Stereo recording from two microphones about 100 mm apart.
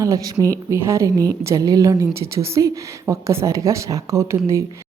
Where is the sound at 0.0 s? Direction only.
35° right (ahead or behind).